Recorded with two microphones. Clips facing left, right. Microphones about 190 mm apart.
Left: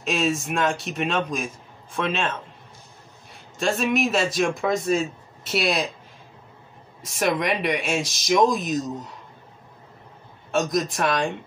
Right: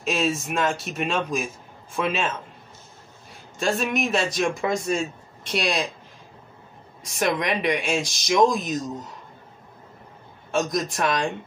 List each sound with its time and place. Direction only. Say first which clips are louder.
0.0 s speech: left 1 dB; centre (ahead or behind)
3.5 s speech: left 2 dB; centre (ahead or behind)
7.0 s speech: left 1 dB; centre (ahead or behind)
10.5 s speech: left 1 dB; centre (ahead or behind)